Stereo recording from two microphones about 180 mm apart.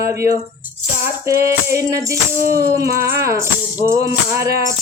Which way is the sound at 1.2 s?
15° right (ahead or behind).